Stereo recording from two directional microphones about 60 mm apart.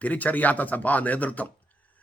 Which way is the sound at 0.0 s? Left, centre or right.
Left.